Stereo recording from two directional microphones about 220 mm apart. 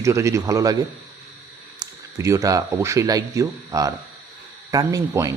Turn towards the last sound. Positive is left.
turn(degrees=-15)  # may be behind; listen again after turning